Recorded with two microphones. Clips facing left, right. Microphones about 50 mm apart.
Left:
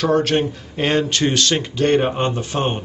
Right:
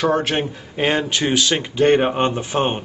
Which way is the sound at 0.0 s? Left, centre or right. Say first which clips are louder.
Left 2 dB; centre.